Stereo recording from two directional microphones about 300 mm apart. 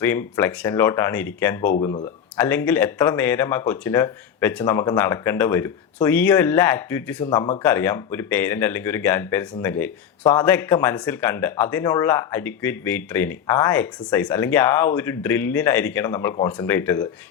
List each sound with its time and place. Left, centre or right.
0.0 s speech: centre
7.3 s speech: centre
7.6 s speech: centre